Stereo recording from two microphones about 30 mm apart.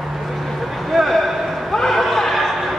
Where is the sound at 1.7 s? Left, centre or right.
Centre.